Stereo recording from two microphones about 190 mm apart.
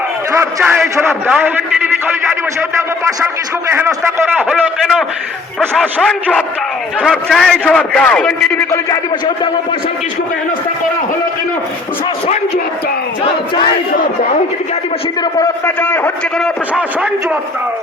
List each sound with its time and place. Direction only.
0.3 s a man's voice: 10° right (ahead or behind)
3.7 s a man's voice: 10° right (ahead or behind)
4.4 s a man's voice: centre (ahead or behind)
8.7 s speech: 20° left (ahead or behind)
15.6 s a man's voice: 10° left (ahead or behind)
16.7 s a man's voice: 5° right (ahead or behind)